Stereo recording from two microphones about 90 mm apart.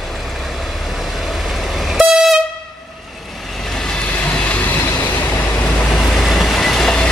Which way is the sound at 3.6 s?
5° left (ahead or behind).